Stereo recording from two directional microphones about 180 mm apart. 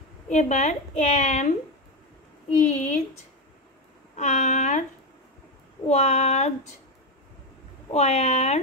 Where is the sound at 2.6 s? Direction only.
45° left (ahead or behind).